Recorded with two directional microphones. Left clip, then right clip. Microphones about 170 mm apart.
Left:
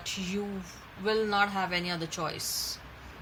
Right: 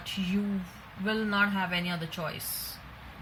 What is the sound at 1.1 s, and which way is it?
Speech, 40° left (ahead or behind).